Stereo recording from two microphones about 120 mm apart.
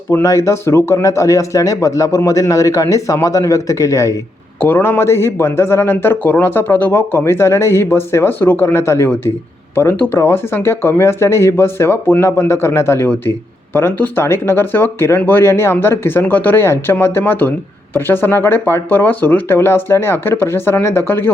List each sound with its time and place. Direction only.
0.1 s speech: 25° left (ahead or behind)